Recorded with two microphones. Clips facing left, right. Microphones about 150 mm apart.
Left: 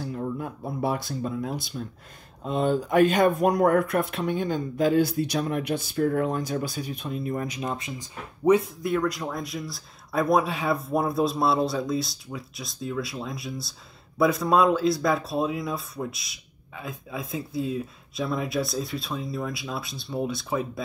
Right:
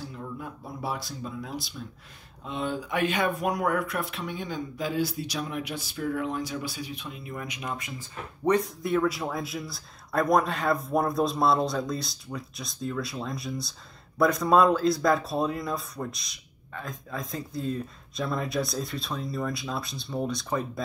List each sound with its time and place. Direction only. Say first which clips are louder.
0.1 s speech: left 7 dB; 50° left (ahead or behind); by 8.1 s 25° left (ahead or behind)
8.5 s speech: left 4 dB; centre (ahead or behind)